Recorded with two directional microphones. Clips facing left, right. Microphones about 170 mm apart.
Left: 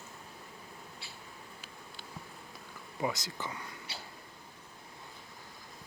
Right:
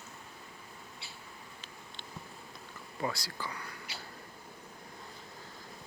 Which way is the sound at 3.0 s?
20° left (ahead or behind).